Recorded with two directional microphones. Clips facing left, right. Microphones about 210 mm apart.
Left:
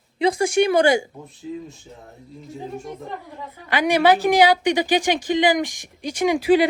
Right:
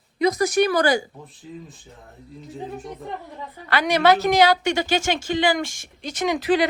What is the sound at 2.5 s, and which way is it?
Speech, centre (ahead or behind).